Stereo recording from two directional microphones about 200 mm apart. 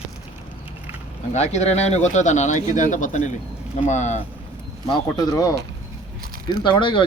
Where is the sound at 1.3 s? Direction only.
35° left (ahead or behind).